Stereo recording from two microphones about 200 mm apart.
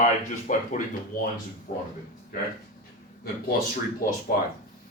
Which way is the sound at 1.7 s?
40° left (ahead or behind).